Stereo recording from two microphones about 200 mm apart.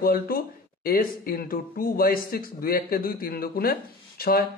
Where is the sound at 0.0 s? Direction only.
50° left (ahead or behind).